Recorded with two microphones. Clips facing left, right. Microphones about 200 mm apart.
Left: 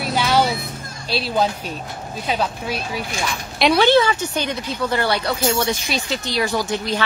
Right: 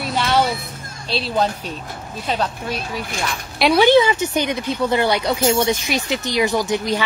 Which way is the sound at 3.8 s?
15° right (ahead or behind).